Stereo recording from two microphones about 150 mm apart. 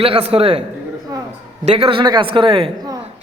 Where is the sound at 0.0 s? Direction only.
40° right (ahead or behind).